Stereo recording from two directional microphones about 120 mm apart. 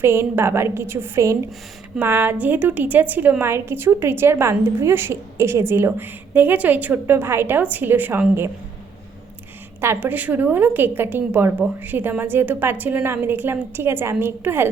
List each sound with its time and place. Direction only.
0.0 s a woman's voice: 20° right (ahead or behind)
9.8 s a woman's voice: 20° right (ahead or behind)